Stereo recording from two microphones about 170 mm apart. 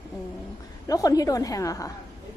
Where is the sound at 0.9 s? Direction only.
20° left (ahead or behind).